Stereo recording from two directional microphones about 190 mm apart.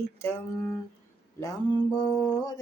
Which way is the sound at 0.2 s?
15° left (ahead or behind).